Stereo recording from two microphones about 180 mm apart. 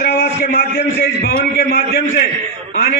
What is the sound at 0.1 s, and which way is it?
A man's voice, 55° left (ahead or behind).